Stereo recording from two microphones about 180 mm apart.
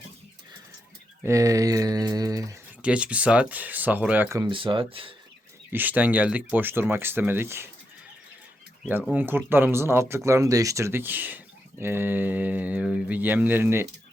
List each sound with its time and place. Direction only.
1.2 s speech: 15° right (ahead or behind)
2.8 s speech: 5° right (ahead or behind)
4.5 s speech: 30° right (ahead or behind)
5.7 s speech: 10° right (ahead or behind)
8.9 s speech: 10° right (ahead or behind)